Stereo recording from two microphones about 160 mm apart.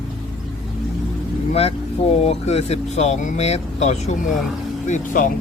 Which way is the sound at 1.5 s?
40° left (ahead or behind).